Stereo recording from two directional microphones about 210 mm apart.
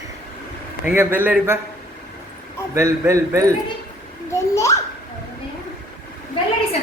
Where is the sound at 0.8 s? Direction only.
10° right (ahead or behind).